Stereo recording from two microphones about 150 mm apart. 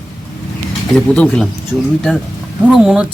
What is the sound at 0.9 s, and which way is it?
Speech, 5° left (ahead or behind).